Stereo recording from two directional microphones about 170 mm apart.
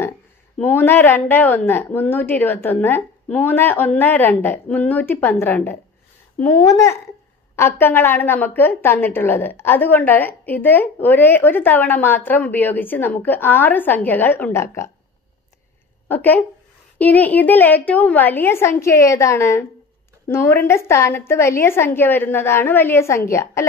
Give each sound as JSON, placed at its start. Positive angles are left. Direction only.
{"t": 0.6, "sound": "a woman's voice", "side_deg": 10}
{"t": 16.1, "sound": "a woman's voice", "side_deg": 10}